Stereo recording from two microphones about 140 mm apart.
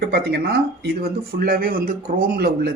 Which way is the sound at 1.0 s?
90° right.